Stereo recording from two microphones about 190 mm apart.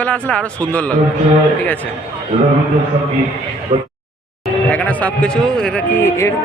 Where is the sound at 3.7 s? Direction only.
30° right (ahead or behind).